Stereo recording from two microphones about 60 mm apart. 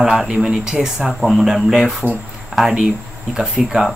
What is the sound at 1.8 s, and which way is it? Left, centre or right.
Speech, right.